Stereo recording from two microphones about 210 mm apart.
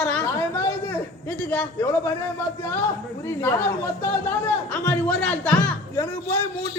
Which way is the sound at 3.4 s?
15° left (ahead or behind).